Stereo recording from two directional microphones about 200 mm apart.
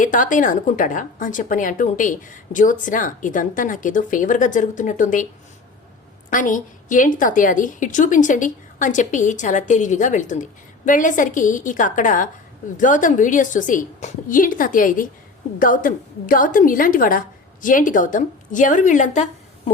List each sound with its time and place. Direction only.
0.0 s a woman's voice: 40° left (ahead or behind)
6.3 s a woman's voice: 40° left (ahead or behind)